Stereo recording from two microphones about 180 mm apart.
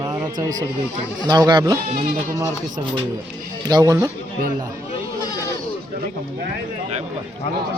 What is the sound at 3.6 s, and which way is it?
Speech, 20° right (ahead or behind).